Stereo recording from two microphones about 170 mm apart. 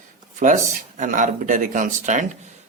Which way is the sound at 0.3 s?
50° right (ahead or behind).